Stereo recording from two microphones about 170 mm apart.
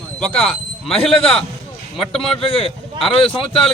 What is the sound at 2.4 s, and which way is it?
Speech, 35° left (ahead or behind).